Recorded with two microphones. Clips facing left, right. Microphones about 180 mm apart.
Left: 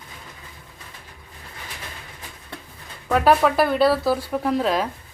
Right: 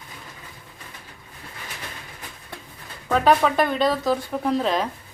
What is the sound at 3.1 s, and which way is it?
Speech, 5° left (ahead or behind).